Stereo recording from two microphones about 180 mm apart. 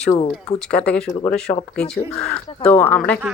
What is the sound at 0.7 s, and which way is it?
Speech, 5° left (ahead or behind).